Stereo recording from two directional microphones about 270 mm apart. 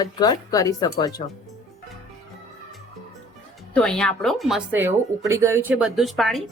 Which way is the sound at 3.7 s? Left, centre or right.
Centre.